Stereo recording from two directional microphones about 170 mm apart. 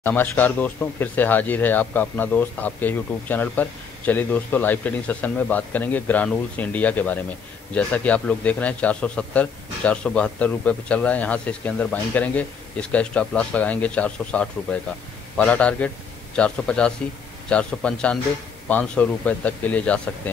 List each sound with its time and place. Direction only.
0.0 s a man's voice: 10° left (ahead or behind)